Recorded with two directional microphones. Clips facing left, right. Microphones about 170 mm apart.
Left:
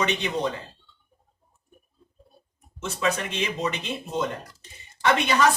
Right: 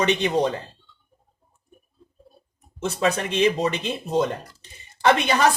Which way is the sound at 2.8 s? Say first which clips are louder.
Right 4 dB; 35° right (ahead or behind).